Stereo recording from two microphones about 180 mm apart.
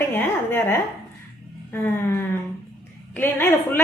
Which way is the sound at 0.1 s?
10° left (ahead or behind).